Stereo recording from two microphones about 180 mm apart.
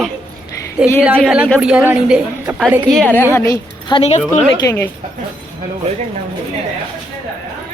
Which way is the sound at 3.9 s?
35° left (ahead or behind).